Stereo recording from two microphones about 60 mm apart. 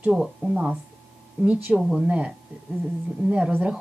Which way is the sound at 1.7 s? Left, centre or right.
Centre.